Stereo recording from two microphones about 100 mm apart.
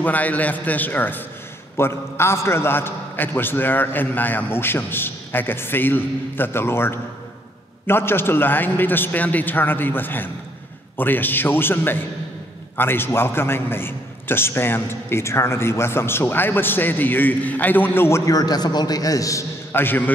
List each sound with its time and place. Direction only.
0.0 s a man's voice: 15° left (ahead or behind); by 19.4 s 35° left (ahead or behind)
19.7 s a man's voice: 20° left (ahead or behind)